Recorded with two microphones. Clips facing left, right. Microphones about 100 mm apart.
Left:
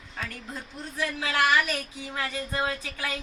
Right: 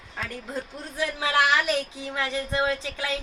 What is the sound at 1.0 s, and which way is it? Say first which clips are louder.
A woman's voice: right 3 dB; 15° right (ahead or behind).